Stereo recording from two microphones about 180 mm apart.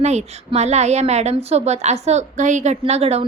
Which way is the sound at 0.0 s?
40° right (ahead or behind).